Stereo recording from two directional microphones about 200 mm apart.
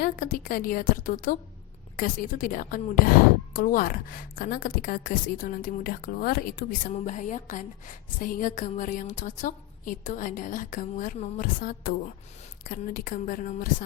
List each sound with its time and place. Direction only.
0.0 s a woman's voice: 45° left (ahead or behind)